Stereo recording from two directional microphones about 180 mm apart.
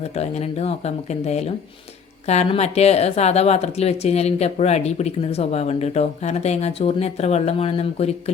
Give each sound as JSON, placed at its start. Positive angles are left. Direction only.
{"t": 0.2, "sound": "speech", "side_deg": 35}